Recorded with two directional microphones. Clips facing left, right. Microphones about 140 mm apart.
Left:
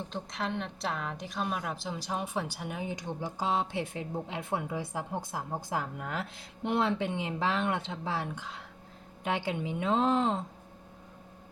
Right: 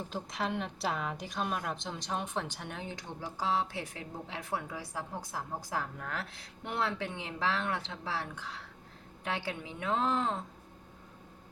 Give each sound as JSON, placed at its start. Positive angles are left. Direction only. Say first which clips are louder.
{"t": 0.1, "sound": "a woman's voice", "louder": "right 1 dB", "side_deg": 0}